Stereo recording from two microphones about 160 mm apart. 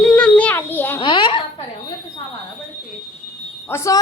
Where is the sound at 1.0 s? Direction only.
30° left (ahead or behind).